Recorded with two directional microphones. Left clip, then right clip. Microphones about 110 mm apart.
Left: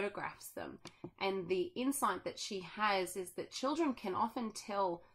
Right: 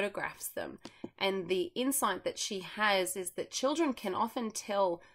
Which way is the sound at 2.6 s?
15° right (ahead or behind).